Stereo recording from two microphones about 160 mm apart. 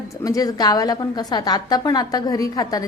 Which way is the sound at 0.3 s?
25° left (ahead or behind).